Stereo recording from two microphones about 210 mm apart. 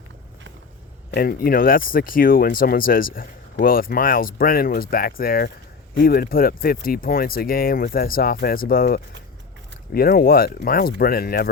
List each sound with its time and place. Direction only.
1.1 s speech: 45° left (ahead or behind)